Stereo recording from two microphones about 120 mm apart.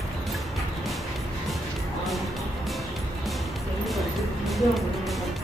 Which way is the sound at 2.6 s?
Centre (ahead or behind).